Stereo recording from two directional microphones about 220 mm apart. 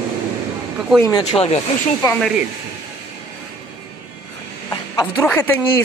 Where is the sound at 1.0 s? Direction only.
15° left (ahead or behind).